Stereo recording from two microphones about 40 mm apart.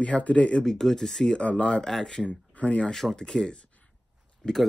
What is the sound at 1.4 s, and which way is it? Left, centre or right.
Speech, left.